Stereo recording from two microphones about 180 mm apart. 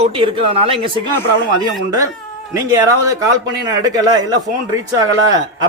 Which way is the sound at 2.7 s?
20° right (ahead or behind).